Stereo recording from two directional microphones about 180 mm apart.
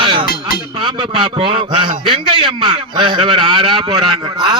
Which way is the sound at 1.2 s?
25° right (ahead or behind).